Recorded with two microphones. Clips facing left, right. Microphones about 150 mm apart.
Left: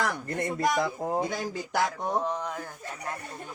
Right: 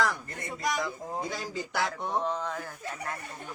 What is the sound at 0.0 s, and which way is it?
Speech, 75° left (ahead or behind).